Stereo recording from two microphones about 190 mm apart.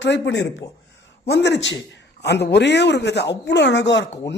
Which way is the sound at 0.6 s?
20° left (ahead or behind).